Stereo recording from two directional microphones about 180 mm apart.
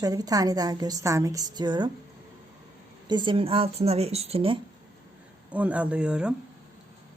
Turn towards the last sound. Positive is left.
turn(degrees=-5)  # may be behind; listen again after turning